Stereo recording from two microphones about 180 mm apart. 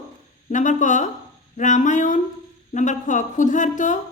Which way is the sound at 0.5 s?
45° left (ahead or behind).